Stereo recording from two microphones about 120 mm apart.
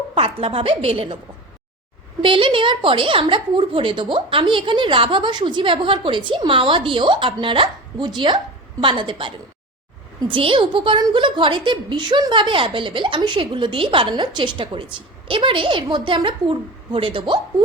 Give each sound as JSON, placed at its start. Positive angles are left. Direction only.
{"t": 0.1, "sound": "a woman's voice", "side_deg": -55}
{"t": 2.2, "sound": "a woman's voice", "side_deg": -45}